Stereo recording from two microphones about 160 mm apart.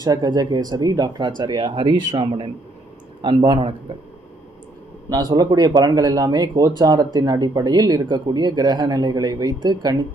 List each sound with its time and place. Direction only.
0.0 s speech: 25° right (ahead or behind)
5.1 s speech: 25° right (ahead or behind)